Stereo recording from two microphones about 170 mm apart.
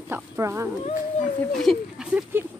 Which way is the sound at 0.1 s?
15° right (ahead or behind).